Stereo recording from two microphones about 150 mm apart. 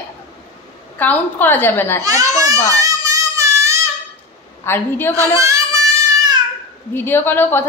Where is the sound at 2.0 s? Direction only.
25° right (ahead or behind).